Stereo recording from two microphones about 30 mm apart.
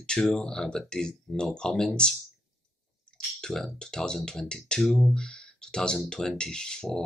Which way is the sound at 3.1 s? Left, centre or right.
Left.